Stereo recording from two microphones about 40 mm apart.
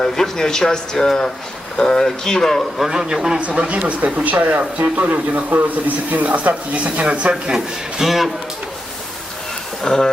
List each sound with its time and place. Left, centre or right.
0.0 s speech: centre
2.8 s a man's voice: centre
3.3 s speech: right
8.0 s a man's voice: centre
9.8 s speech: centre